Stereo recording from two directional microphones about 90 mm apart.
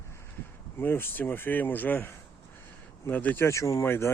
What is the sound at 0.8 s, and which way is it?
Speech, 25° left (ahead or behind).